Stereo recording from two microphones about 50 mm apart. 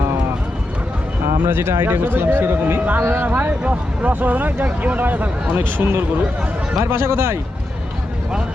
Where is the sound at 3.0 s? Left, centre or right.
Right.